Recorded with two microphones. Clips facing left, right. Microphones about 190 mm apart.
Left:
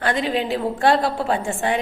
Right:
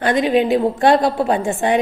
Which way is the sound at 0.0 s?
15° right (ahead or behind).